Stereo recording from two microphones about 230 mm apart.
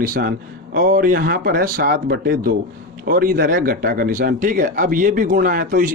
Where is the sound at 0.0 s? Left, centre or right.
Right.